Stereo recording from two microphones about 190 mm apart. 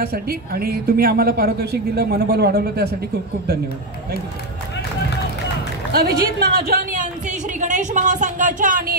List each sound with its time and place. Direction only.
0.0 s a woman's voice: 55° right (ahead or behind)
5.9 s a woman's voice: 55° right (ahead or behind)